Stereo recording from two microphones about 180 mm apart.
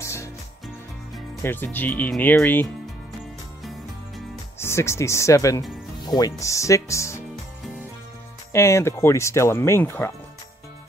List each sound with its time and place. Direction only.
0.0 s music: 15° left (ahead or behind)
1.4 s speech: 10° left (ahead or behind)
4.6 s speech: 15° left (ahead or behind)
8.5 s speech: 15° left (ahead or behind)